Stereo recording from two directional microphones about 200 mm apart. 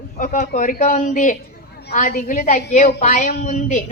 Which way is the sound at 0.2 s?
40° left (ahead or behind).